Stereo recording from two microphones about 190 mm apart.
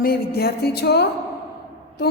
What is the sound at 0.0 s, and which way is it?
A woman's voice, 55° left (ahead or behind).